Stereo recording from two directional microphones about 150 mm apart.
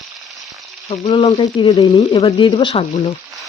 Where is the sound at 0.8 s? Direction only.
40° left (ahead or behind).